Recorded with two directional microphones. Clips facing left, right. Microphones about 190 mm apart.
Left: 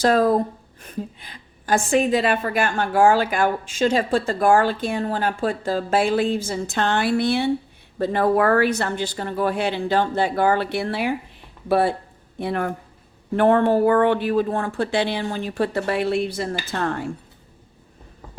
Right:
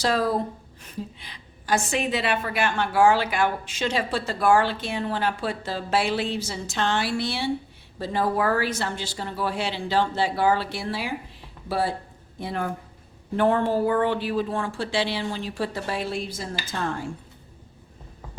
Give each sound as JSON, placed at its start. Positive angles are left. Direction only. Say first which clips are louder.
{"t": 0.0, "sound": "a woman's voice", "louder": "left 6 dB", "side_deg": 50}